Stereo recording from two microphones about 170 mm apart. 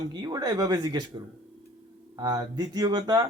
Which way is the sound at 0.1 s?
25° right (ahead or behind).